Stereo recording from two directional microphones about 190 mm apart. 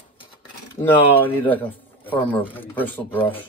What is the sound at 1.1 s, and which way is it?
Speech, 10° left (ahead or behind).